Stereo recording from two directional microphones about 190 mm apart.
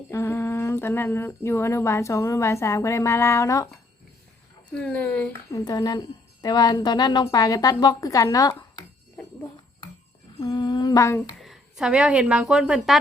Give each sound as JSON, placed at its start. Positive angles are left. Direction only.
{"t": 0.1, "sound": "speech", "side_deg": 15}
{"t": 4.7, "sound": "speech", "side_deg": 5}
{"t": 5.5, "sound": "speech", "side_deg": 20}
{"t": 10.4, "sound": "speech", "side_deg": 20}
{"t": 11.3, "sound": "a woman's voice", "side_deg": 0}